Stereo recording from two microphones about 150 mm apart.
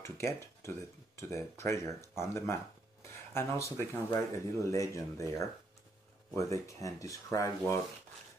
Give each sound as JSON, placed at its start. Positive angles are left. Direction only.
{"t": 0.0, "sound": "speech", "side_deg": 20}